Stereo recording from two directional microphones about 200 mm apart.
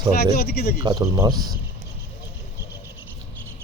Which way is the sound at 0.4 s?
55° left (ahead or behind).